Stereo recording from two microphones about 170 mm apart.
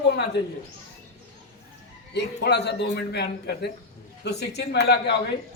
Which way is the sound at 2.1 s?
85° left.